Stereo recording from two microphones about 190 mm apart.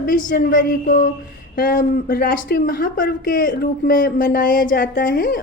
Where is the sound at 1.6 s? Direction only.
50° left (ahead or behind).